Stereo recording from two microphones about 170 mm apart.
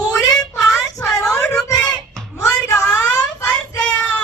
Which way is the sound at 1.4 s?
20° left (ahead or behind).